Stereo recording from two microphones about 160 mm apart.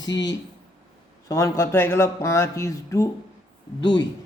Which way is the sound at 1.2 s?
20° left (ahead or behind).